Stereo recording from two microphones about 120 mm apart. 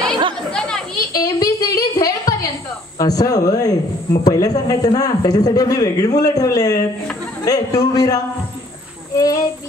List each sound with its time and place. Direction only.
0.5 s chatter: 5° left (ahead or behind)
1.1 s a sound: 30° left (ahead or behind)
3.0 s speech: 30° left (ahead or behind)